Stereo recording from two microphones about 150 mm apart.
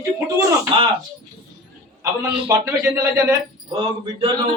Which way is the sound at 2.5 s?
20° right (ahead or behind).